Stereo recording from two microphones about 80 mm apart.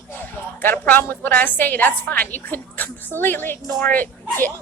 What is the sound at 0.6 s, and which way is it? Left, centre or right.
A woman's voice, left.